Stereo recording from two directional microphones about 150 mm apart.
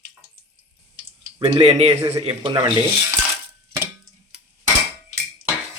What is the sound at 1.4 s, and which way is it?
Speech, 40° right (ahead or behind).